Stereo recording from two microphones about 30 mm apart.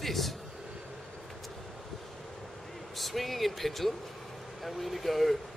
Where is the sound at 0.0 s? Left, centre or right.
Centre.